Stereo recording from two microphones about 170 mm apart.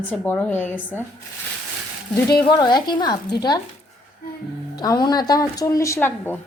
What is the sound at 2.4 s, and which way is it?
A woman's voice, 25° left (ahead or behind).